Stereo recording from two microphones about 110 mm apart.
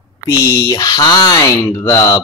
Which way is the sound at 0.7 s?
35° left (ahead or behind).